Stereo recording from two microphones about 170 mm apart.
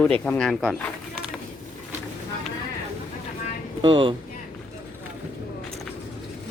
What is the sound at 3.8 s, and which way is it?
Speech, 30° right (ahead or behind).